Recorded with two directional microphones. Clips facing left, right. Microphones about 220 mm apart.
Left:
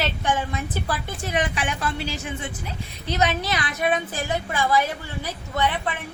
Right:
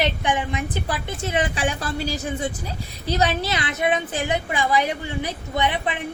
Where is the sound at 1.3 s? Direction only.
30° right (ahead or behind).